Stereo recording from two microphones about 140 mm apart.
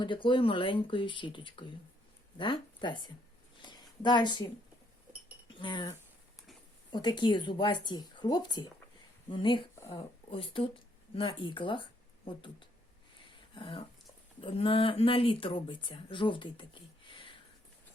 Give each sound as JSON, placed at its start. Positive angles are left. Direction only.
{"t": 0.0, "sound": "speech", "side_deg": 35}
{"t": 3.6, "sound": "a sound", "side_deg": 30}
{"t": 5.5, "sound": "speech", "side_deg": 30}
{"t": 6.9, "sound": "speech", "side_deg": 30}
{"t": 13.1, "sound": "a sound", "side_deg": 40}
{"t": 14.4, "sound": "speech", "side_deg": 40}